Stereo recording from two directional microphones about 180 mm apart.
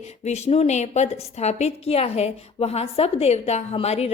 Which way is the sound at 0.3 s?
35° left (ahead or behind).